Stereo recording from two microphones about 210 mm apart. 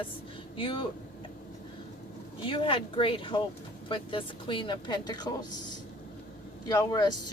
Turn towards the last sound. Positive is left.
turn(degrees=20)  # may be behind; listen again after turning